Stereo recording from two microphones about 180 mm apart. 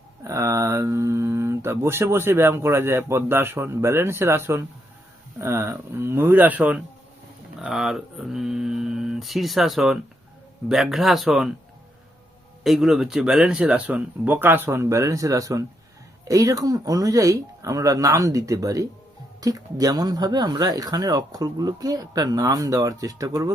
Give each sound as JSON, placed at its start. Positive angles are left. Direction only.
{"t": 0.3, "sound": "speech", "side_deg": -15}
{"t": 12.6, "sound": "speech", "side_deg": 0}